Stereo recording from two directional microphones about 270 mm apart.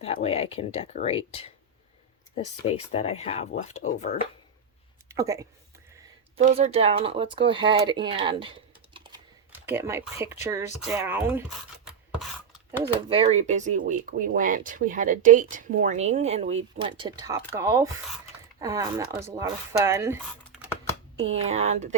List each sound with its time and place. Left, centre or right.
0.0 s speech: left
2.9 s speech: left
5.0 s speech: centre
6.3 s speech: right
9.5 s speech: centre
13.1 s speech: centre
21.2 s speech: right